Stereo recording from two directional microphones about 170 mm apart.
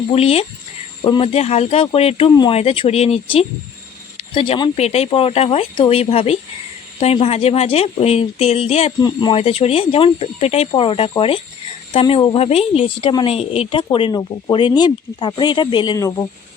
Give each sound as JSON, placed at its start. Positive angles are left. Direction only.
{"t": 0.1, "sound": "a woman's voice", "side_deg": 35}